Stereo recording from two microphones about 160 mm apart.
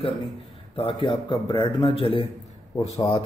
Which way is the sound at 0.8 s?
35° left (ahead or behind).